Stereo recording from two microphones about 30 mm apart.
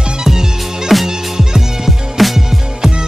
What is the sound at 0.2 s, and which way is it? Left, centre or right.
Music, centre.